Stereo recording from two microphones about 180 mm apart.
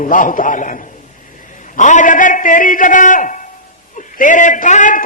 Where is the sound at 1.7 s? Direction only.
45° left (ahead or behind).